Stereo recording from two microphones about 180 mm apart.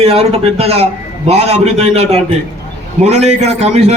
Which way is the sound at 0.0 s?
35° right (ahead or behind).